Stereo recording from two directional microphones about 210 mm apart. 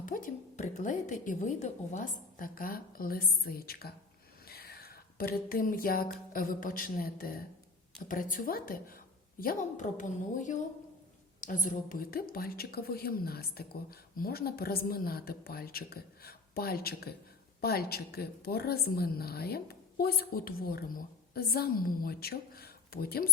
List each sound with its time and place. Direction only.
0.0 s speech: 40° left (ahead or behind)
4.4 s a sound: 50° left (ahead or behind)
6.3 s a woman's voice: 40° left (ahead or behind)